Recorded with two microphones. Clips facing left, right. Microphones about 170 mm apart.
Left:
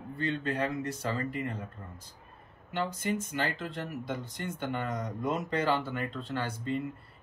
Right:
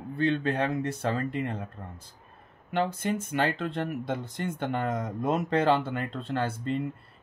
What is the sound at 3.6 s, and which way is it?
A man's voice, 60° right (ahead or behind).